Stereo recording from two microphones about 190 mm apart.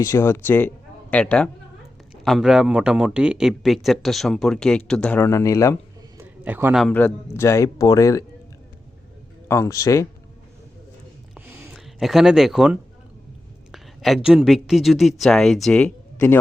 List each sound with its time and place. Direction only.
0.0 s speech: 15° left (ahead or behind)
6.1 s a sound: 10° right (ahead or behind)
6.8 s speech: 10° left (ahead or behind)
9.5 s speech: 15° left (ahead or behind)
11.3 s a sound: 10° right (ahead or behind)
13.7 s speech: centre (ahead or behind)